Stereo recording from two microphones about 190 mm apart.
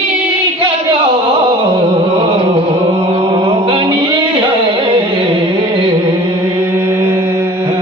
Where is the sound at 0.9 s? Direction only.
25° right (ahead or behind).